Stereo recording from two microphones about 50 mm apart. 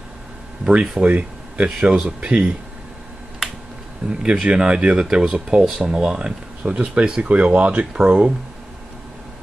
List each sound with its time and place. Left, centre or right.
1.0 s speech: right
4.1 s speech: centre